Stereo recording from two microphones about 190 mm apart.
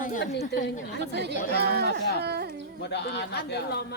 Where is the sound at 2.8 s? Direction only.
60° left (ahead or behind).